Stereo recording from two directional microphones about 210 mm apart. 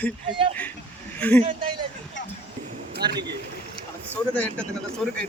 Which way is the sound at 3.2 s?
55° right (ahead or behind).